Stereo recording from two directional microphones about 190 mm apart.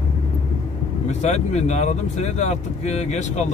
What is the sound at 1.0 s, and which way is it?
Speech, 35° left (ahead or behind).